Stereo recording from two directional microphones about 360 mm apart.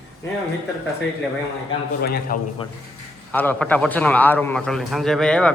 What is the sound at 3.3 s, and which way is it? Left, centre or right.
A man's voice, centre.